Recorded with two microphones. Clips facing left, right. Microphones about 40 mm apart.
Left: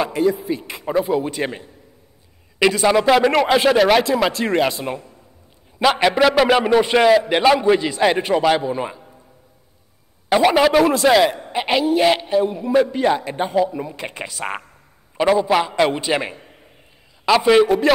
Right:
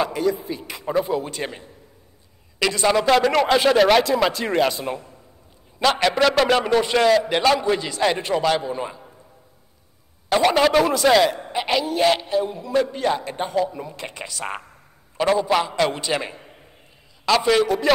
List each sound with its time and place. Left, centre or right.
0.1 s a man's voice: left
10.3 s a man's voice: centre
11.5 s a man's voice: centre
13.7 s speech: left
13.9 s a man's voice: left
14.4 s speech: centre
15.1 s speech: centre
17.5 s a man's voice: centre